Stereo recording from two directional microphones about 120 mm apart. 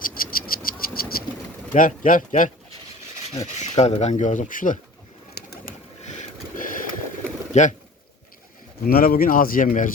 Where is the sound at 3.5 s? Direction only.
70° left (ahead or behind); by 4.8 s 90° left.